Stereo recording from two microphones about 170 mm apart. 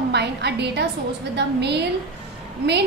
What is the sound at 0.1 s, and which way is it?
A woman's voice, 80° right.